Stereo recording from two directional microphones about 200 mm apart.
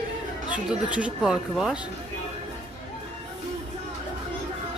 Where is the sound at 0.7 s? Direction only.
5° right (ahead or behind).